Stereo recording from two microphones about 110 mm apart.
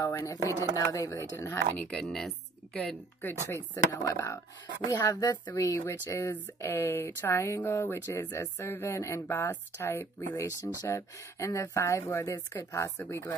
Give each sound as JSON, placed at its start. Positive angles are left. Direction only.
{"t": 0.0, "sound": "speech", "side_deg": 30}
{"t": 1.8, "sound": "speech", "side_deg": 10}
{"t": 3.4, "sound": "speech", "side_deg": 25}